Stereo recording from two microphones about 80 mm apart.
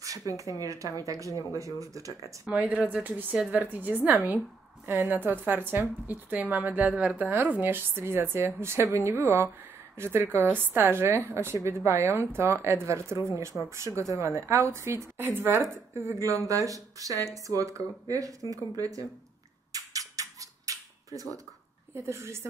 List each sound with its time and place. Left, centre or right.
0.0 s speech: right
2.4 s speech: centre; by 19.0 s right
19.7 s a sound: right
21.9 s speech: right